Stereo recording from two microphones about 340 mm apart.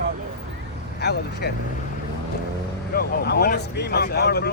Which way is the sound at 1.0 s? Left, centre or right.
Left.